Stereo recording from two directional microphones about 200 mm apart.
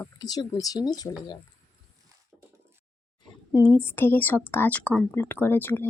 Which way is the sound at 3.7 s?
10° left (ahead or behind).